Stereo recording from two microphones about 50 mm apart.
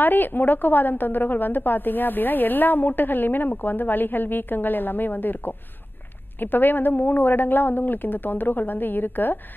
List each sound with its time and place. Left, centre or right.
0.0 s a woman's voice: left